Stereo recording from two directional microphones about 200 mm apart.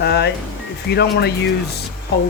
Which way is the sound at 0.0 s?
55° left (ahead or behind).